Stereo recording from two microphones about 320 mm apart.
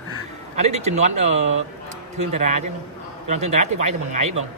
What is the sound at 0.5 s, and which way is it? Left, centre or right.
Speech, centre.